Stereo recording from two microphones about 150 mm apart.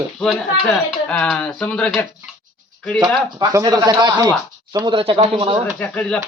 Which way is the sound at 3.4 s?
25° right (ahead or behind).